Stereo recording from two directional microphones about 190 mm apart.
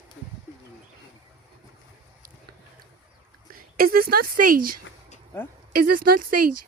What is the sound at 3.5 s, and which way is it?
A woman's voice, 50° right (ahead or behind).